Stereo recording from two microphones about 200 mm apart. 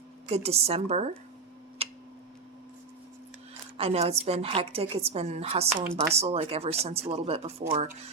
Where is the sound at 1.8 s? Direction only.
30° right (ahead or behind).